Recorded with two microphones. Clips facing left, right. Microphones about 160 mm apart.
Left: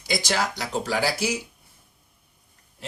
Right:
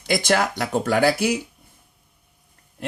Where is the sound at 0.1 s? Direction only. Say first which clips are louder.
Right 5 dB; 55° right (ahead or behind).